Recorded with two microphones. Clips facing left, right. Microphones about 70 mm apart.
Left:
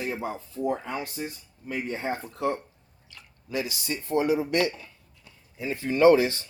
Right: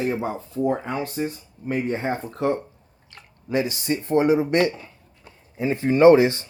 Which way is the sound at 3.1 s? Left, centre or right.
Right.